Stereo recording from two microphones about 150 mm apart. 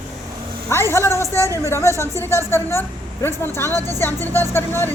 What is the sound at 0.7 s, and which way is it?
A woman's voice, 15° left (ahead or behind).